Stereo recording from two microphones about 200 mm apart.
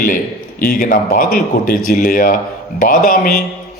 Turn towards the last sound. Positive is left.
turn(degrees=45)  # may be behind; listen again after turning